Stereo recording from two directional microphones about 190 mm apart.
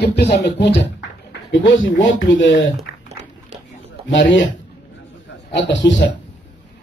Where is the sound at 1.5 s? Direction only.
85° left.